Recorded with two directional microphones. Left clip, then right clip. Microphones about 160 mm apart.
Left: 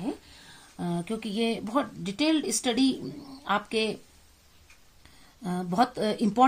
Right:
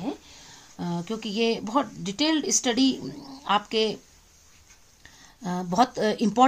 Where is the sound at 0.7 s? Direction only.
15° right (ahead or behind).